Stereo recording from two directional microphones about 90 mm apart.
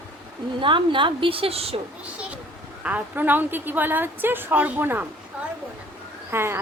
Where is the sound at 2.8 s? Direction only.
20° right (ahead or behind).